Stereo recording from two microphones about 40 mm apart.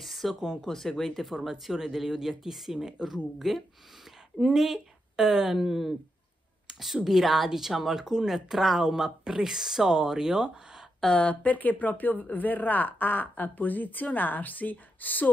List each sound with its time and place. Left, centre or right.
0.0 s a sound: centre
0.6 s speech: centre
1.4 s speech: centre
6.7 s a sound: centre
7.1 s speech: centre
11.1 s speech: left